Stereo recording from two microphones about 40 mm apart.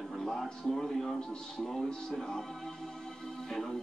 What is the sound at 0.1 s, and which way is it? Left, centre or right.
A man's voice, centre.